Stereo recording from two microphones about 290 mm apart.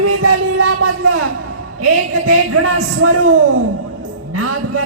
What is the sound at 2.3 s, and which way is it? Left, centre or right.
Music, right.